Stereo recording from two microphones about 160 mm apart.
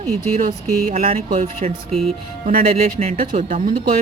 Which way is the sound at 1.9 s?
Centre (ahead or behind).